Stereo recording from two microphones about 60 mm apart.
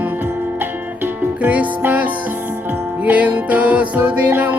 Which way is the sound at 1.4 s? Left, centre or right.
Right.